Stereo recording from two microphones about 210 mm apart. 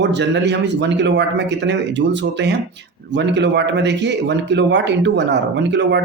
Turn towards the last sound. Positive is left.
turn(degrees=-55)  # may be behind; listen again after turning